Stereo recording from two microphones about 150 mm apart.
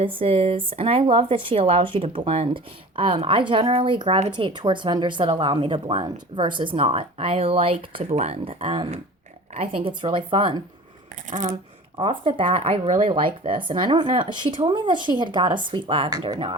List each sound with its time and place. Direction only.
0.0 s speech: 35° right (ahead or behind)
11.3 s speech: 55° right (ahead or behind)
11.9 s speech: 35° right (ahead or behind)